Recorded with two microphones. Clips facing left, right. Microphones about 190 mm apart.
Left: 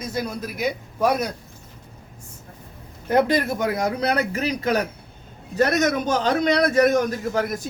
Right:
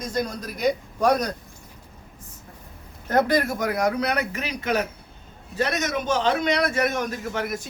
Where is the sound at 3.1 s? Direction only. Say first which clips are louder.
Left 2 dB; 20° left (ahead or behind); by 7.4 s 35° left (ahead or behind).